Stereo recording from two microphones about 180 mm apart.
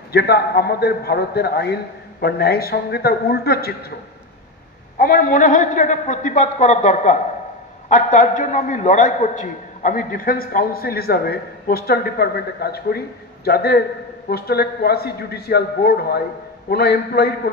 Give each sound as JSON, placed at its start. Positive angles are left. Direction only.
{"t": 0.1, "sound": "a man's voice", "side_deg": 60}
{"t": 4.9, "sound": "a man's voice", "side_deg": 50}